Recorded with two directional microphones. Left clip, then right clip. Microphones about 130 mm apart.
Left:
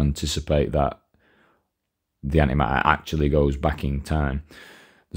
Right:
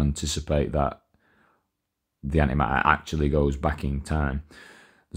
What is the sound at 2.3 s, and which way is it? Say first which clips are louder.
Speech: left 2 dB; 30° left (ahead or behind).